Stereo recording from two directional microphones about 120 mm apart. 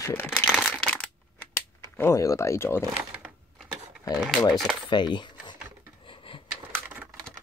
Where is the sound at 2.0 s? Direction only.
25° left (ahead or behind).